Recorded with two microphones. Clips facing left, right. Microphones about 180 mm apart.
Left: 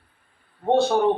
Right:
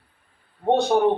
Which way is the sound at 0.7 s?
15° right (ahead or behind).